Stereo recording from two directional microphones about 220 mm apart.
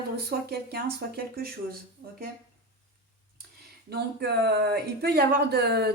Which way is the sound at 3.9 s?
50° right (ahead or behind).